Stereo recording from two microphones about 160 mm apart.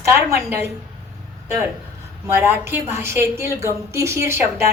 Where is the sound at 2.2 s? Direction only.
15° right (ahead or behind).